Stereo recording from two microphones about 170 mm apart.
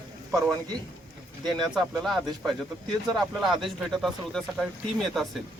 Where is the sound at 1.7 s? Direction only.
5° right (ahead or behind).